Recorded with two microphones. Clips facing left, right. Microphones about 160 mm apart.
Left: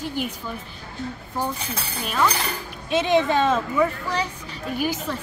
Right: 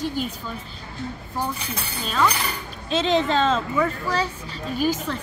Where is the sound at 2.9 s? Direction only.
15° left (ahead or behind).